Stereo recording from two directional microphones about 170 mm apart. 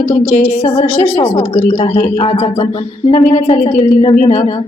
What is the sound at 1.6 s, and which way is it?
A woman's voice, 45° left (ahead or behind).